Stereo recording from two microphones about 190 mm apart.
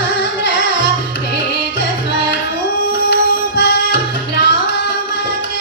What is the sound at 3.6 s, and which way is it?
Tabla, 65° left (ahead or behind).